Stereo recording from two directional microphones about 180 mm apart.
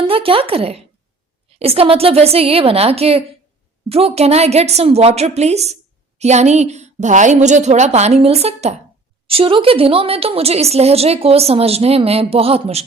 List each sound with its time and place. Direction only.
0.1 s a woman's voice: 30° right (ahead or behind)